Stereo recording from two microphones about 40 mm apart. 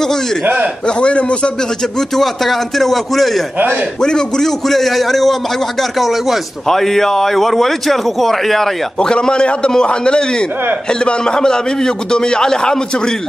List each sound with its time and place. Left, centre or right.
0.8 s a man's voice: left
2.0 s a man's voice: centre
4.0 s a man's voice: centre
6.7 s a man's voice: centre
9.0 s a man's voice: centre